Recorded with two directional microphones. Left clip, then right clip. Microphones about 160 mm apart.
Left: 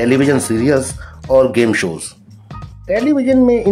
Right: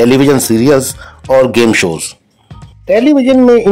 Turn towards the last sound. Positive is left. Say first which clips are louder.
# right 6 dB
turn(degrees=-25)  # may be behind; listen again after turning